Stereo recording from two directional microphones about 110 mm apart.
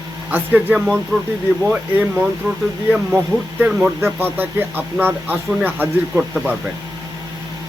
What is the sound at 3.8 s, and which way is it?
Speech, 20° right (ahead or behind).